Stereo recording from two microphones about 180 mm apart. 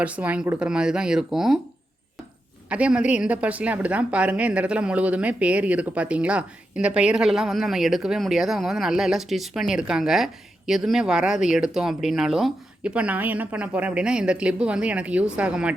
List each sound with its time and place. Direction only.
0.0 s speech: 10° right (ahead or behind)
2.6 s speech: 5° right (ahead or behind)